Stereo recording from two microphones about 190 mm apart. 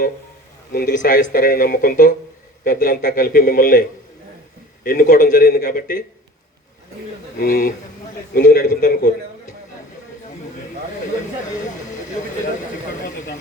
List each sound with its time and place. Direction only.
0.7 s speech: 50° left (ahead or behind)
7.3 s speech: 50° left (ahead or behind)